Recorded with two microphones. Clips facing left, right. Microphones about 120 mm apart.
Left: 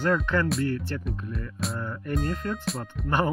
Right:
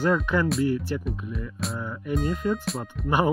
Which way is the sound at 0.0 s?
5° right (ahead or behind).